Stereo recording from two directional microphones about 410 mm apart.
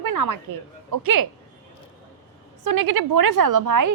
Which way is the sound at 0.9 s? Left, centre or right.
Right.